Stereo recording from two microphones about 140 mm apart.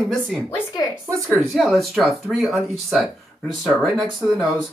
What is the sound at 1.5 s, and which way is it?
Speech, centre (ahead or behind).